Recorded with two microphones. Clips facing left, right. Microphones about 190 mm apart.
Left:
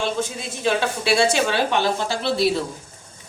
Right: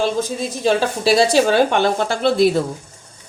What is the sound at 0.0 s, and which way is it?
Speech, 35° right (ahead or behind).